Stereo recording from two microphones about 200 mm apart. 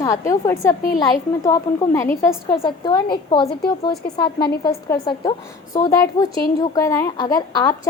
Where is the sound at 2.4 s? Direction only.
25° left (ahead or behind).